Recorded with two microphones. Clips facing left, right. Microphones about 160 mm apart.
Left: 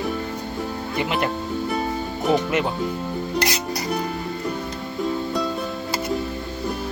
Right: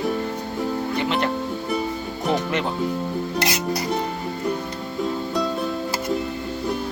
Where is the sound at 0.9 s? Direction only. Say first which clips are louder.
Left 2 dB; 10° left (ahead or behind).